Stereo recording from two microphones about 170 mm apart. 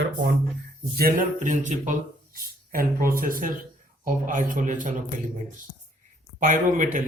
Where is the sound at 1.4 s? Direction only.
45° right (ahead or behind).